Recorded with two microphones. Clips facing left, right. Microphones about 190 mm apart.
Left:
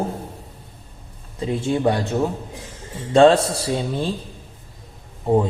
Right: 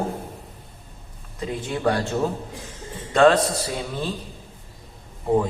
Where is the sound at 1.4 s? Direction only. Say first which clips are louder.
Left 4 dB; 25° left (ahead or behind).